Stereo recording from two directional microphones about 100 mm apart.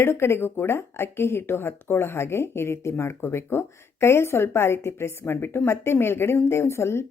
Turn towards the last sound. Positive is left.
turn(degrees=25)  # may be behind; listen again after turning